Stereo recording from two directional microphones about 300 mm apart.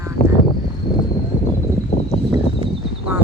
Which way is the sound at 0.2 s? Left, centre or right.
Left.